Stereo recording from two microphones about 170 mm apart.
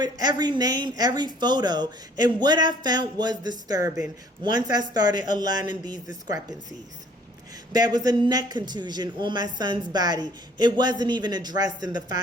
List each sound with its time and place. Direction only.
0.0 s speech: 25° right (ahead or behind)
7.7 s speech: 25° right (ahead or behind)